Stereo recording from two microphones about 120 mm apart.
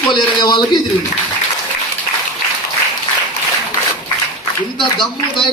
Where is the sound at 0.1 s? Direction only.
40° left (ahead or behind).